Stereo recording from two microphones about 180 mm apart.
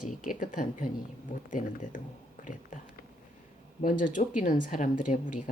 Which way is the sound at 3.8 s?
50° left (ahead or behind).